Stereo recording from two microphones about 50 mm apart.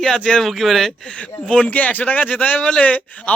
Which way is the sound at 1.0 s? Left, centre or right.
Left.